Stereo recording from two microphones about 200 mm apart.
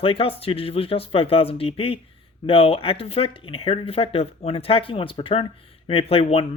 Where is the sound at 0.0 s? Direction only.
30° left (ahead or behind).